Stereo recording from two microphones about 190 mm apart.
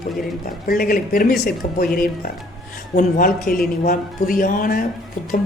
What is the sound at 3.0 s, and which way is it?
Speech, 45° left (ahead or behind).